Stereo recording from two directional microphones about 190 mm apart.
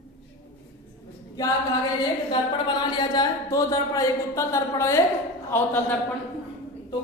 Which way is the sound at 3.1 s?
20° left (ahead or behind).